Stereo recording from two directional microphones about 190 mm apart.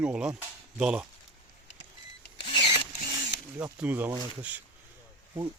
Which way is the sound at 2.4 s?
25° left (ahead or behind).